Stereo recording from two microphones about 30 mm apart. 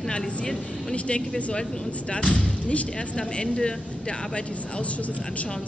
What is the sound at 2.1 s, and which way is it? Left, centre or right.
Speech, left.